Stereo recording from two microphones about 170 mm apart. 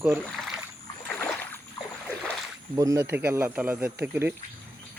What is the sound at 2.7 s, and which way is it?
Speech, 20° right (ahead or behind).